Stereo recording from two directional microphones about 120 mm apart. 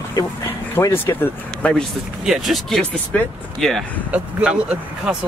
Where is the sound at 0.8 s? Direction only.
20° left (ahead or behind).